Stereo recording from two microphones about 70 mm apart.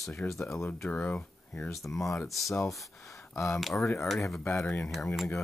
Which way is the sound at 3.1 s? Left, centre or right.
Left.